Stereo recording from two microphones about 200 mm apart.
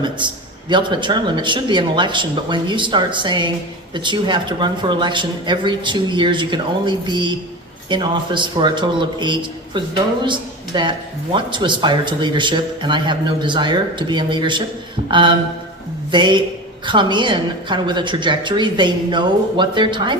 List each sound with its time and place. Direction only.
0.7 s a man's voice: 25° right (ahead or behind)